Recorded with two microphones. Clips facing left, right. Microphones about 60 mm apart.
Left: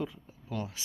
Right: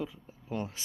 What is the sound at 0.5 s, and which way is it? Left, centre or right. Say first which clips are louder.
Speech: right 1 dB; right.